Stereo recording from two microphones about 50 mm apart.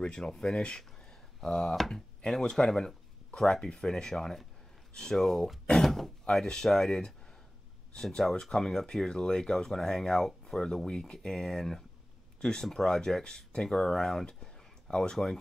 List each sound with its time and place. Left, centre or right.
0.0 s speech: centre